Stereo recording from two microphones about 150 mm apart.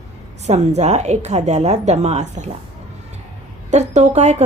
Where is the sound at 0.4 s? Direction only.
50° right (ahead or behind).